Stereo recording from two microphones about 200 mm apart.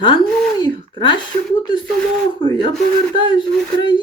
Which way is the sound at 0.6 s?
25° left (ahead or behind).